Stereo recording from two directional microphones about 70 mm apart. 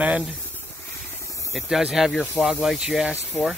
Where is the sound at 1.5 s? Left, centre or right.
Centre.